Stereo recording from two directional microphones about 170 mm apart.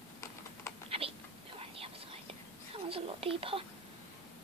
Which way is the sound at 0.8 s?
35° right (ahead or behind).